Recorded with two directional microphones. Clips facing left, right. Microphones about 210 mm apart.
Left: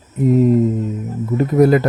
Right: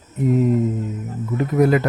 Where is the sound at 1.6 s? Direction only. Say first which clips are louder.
Left 4 dB; 35° left (ahead or behind).